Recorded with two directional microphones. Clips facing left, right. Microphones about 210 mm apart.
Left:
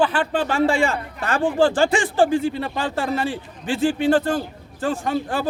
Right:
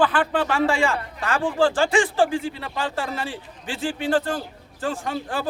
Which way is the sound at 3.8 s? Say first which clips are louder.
Left 5 dB; 50° left (ahead or behind).